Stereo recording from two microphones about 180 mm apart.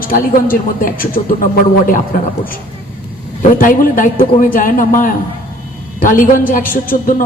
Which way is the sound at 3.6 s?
50° left (ahead or behind).